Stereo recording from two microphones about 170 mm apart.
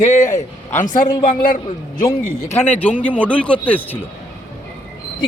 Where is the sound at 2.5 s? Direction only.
10° left (ahead or behind).